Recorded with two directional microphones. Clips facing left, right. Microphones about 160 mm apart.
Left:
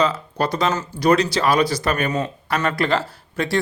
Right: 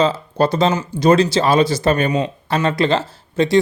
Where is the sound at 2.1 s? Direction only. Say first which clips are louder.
Right 4 dB; 15° right (ahead or behind).